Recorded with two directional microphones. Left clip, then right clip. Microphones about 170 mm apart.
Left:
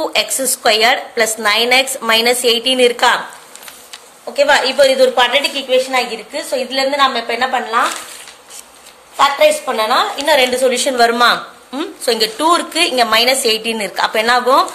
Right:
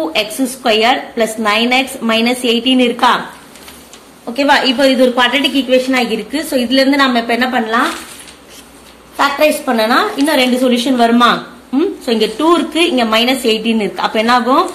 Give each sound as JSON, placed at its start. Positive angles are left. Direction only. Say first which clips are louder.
{"t": 0.1, "sound": "a woman's voice", "louder": "even", "side_deg": 40}
{"t": 4.3, "sound": "a woman's voice", "louder": "right 1 dB", "side_deg": 15}
{"t": 6.4, "sound": "a woman's voice", "louder": "right 4 dB", "side_deg": 10}
{"t": 9.1, "sound": "a woman's voice", "louder": "left 1 dB", "side_deg": 10}
{"t": 10.3, "sound": "a woman's voice", "louder": "left 2 dB", "side_deg": 35}